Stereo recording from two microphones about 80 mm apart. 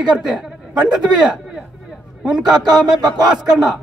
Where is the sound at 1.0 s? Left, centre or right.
Centre.